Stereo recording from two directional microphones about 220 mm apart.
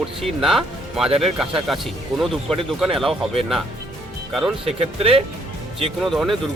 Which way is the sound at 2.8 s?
Centre (ahead or behind).